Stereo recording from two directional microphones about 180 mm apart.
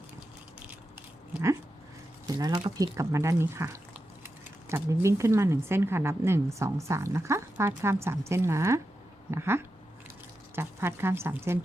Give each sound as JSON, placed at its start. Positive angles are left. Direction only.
{"t": 2.2, "sound": "speech", "side_deg": -20}